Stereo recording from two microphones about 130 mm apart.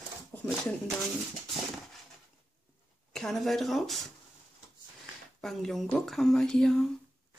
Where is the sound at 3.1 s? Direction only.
Centre (ahead or behind).